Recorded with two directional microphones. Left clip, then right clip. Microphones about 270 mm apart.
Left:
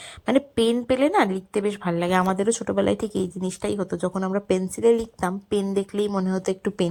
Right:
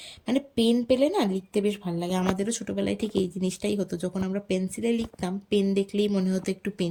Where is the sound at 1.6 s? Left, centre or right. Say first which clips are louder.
Left 4 dB; left.